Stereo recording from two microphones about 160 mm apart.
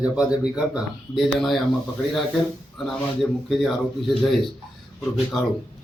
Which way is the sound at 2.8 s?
Centre (ahead or behind).